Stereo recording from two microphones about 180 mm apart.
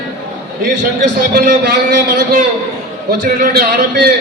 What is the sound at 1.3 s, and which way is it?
A man's voice, 60° right (ahead or behind).